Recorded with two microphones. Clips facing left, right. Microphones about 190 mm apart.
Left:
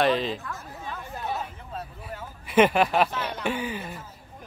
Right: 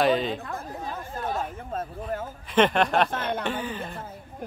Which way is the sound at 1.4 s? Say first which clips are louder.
Right 5 dB; 45° right (ahead or behind).